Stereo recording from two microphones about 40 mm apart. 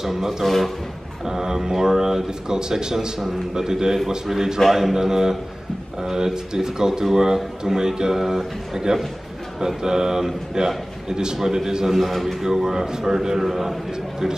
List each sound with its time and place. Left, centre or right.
0.0 s speech: centre
4.6 s a man's voice: centre
4.9 s speech: centre
12.4 s speech: centre